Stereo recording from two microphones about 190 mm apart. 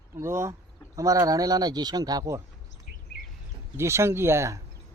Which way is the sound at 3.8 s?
15° right (ahead or behind).